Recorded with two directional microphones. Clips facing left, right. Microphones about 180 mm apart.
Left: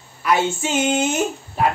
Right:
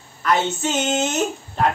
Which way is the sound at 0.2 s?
10° left (ahead or behind).